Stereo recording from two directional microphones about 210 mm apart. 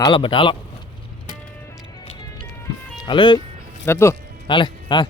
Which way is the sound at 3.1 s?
20° left (ahead or behind).